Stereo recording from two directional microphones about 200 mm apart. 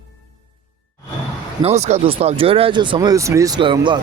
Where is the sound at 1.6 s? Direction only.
35° right (ahead or behind).